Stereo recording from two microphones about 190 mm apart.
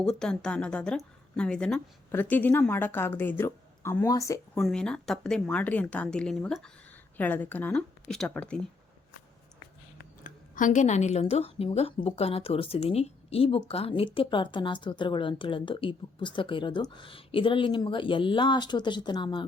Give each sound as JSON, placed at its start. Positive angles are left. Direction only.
{"t": 0.0, "sound": "a woman's voice", "side_deg": 5}
{"t": 4.5, "sound": "a woman's voice", "side_deg": 5}
{"t": 10.2, "sound": "a woman's voice", "side_deg": 45}